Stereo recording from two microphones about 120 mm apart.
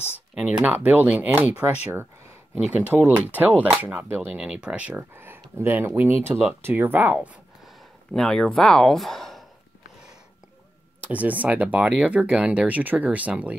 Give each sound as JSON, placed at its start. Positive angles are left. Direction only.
{"t": 0.3, "sound": "speech", "side_deg": -10}
{"t": 2.7, "sound": "speech", "side_deg": -15}
{"t": 7.2, "sound": "speech", "side_deg": 0}
{"t": 11.1, "sound": "speech", "side_deg": -10}